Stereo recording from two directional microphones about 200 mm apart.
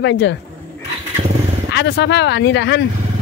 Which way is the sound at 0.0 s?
60° left (ahead or behind).